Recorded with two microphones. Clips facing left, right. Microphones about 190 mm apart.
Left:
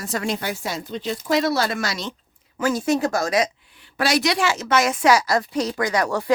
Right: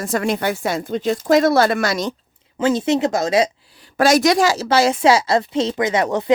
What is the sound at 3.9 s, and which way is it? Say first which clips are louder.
A woman's voice: right 7 dB; 45° right (ahead or behind).